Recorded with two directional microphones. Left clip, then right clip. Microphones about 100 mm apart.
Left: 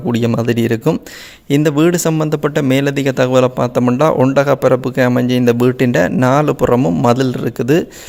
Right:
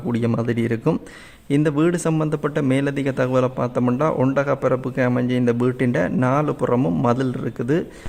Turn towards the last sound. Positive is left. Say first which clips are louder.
# left 8 dB
turn(degrees=50)  # may be behind; listen again after turning